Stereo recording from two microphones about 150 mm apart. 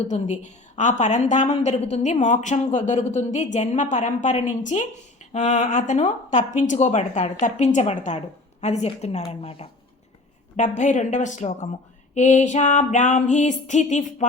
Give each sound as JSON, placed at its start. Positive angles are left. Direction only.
{"t": 0.1, "sound": "speech", "side_deg": 50}
{"t": 10.6, "sound": "a woman's voice", "side_deg": 55}